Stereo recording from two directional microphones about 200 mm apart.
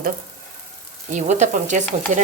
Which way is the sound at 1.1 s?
35° right (ahead or behind).